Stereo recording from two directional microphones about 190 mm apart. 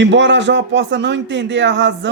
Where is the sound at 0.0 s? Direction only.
70° right (ahead or behind).